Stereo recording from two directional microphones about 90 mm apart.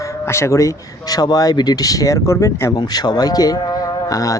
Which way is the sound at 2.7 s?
45° left (ahead or behind).